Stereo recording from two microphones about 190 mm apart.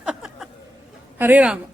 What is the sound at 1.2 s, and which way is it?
Speech, 10° right (ahead or behind).